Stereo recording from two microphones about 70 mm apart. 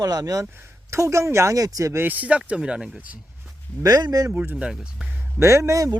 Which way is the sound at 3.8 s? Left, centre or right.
Right.